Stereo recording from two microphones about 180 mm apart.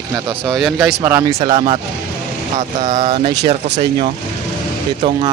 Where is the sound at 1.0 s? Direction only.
15° right (ahead or behind).